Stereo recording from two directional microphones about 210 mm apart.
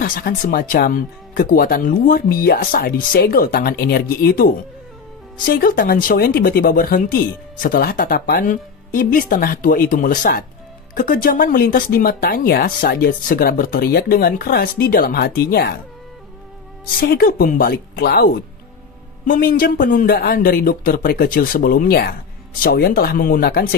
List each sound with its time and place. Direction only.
0.0 s speech: 45° left (ahead or behind)
17.0 s speech: 45° left (ahead or behind)